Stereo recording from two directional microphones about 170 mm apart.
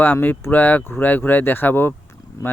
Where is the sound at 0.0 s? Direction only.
10° left (ahead or behind).